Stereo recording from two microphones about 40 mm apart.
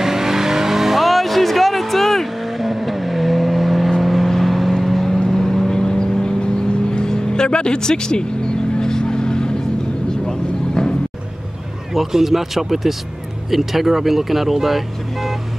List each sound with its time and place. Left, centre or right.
0.0 s vehicle: centre
11.9 s speech: centre